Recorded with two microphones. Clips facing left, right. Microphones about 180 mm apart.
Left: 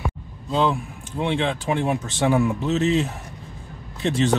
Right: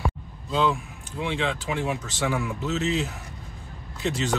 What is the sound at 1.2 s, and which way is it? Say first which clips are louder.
Speech: left 4 dB; 35° left (ahead or behind).